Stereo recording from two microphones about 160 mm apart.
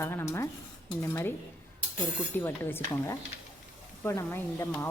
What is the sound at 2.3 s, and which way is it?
A woman's voice, 15° left (ahead or behind).